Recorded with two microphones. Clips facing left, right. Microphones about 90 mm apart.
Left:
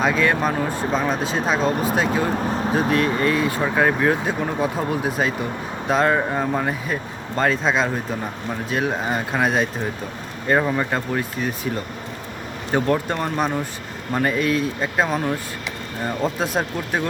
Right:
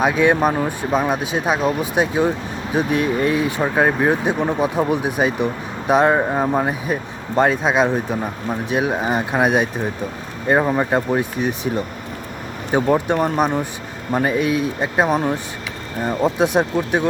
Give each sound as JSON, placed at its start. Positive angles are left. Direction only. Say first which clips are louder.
{"t": 0.0, "sound": "speech", "louder": "right 4 dB", "side_deg": -15}
{"t": 2.7, "sound": "speech", "louder": "right 3 dB", "side_deg": -15}
{"t": 10.8, "sound": "speech", "louder": "right 5 dB", "side_deg": -20}